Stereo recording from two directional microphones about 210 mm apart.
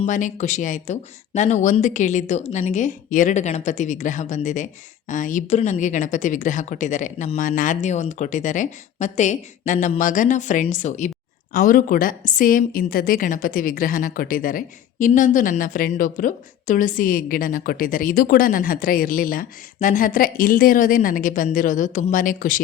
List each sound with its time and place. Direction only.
0.0 s speech: 35° left (ahead or behind)